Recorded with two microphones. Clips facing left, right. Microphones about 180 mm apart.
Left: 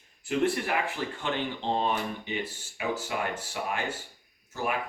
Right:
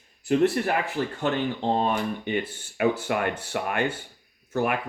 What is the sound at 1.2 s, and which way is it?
Speech, 45° right (ahead or behind).